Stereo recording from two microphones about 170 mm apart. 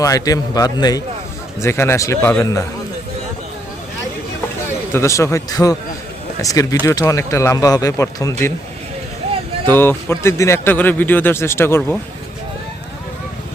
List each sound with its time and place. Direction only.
0.0 s speech: 20° left (ahead or behind)
4.9 s speech: 15° left (ahead or behind)
9.6 s speech: 15° left (ahead or behind)